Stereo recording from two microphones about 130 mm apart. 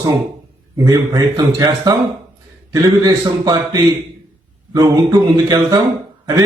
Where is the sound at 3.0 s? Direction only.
30° right (ahead or behind).